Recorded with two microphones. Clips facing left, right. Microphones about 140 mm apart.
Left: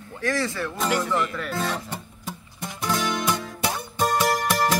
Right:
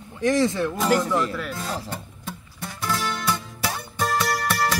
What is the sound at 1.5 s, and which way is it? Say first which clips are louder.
Speech: left 3 dB; 75° left (ahead or behind).